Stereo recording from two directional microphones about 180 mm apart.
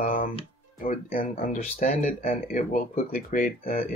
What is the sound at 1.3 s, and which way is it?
Speech, 35° left (ahead or behind).